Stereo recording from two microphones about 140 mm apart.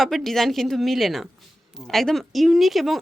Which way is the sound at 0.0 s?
Centre (ahead or behind).